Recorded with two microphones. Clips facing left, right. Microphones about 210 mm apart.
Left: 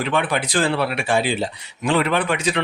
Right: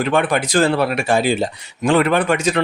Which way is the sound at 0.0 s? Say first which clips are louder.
Right 4 dB; 45° right (ahead or behind).